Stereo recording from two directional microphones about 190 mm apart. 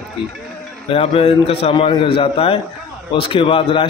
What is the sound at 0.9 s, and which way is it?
A man's voice, 30° left (ahead or behind).